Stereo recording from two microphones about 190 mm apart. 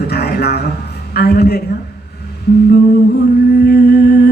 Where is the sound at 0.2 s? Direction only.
60° left (ahead or behind).